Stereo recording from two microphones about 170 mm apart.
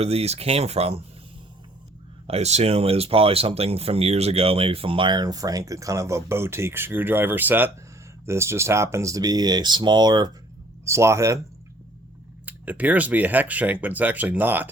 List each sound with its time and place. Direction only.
0.0 s speech: 35° right (ahead or behind)
2.2 s speech: 40° right (ahead or behind); by 11.3 s 15° right (ahead or behind)
12.5 s speech: 10° right (ahead or behind)